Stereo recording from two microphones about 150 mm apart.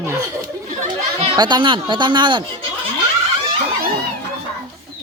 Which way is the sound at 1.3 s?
30° right (ahead or behind).